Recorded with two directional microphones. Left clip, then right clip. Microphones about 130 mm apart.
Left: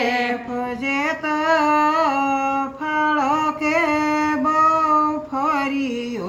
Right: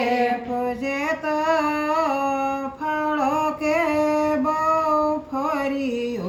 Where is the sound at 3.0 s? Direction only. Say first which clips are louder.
Left 4 dB; 40° right (ahead or behind).